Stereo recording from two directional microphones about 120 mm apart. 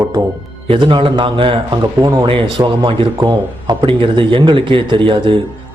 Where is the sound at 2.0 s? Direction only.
30° right (ahead or behind).